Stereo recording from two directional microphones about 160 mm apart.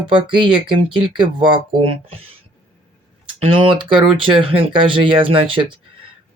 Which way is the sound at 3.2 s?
30° right (ahead or behind).